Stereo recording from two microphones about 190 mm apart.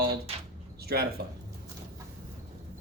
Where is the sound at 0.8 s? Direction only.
55° right (ahead or behind).